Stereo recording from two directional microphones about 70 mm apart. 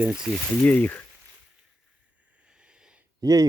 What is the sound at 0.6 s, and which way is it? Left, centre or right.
Speech, left.